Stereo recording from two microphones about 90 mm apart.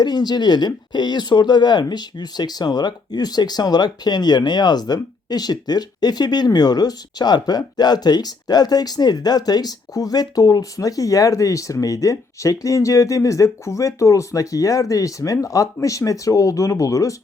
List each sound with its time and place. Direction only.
0.0 s speech: 50° left (ahead or behind)